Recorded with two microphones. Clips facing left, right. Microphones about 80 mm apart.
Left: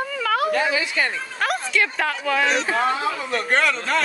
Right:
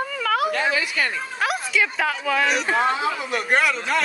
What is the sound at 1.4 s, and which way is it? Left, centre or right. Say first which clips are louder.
A woman's voice: left 1 dB; centre.